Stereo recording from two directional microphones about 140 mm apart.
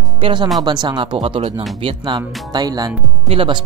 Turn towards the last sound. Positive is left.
turn(degrees=-40)  # may be behind; listen again after turning